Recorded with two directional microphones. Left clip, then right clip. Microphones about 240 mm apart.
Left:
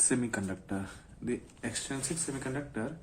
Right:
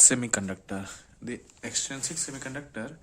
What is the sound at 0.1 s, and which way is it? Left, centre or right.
Speech, right.